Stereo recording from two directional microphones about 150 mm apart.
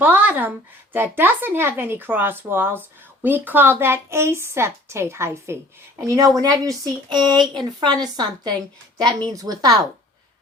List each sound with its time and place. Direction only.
0.0 s a woman's voice: 10° right (ahead or behind)